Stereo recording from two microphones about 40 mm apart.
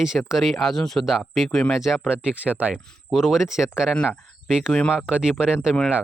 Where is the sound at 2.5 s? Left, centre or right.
Right.